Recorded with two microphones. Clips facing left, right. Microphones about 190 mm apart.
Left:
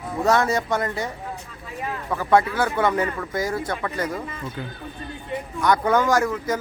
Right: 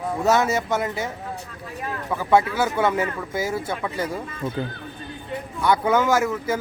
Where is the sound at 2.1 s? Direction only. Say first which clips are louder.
Even; 5° right (ahead or behind).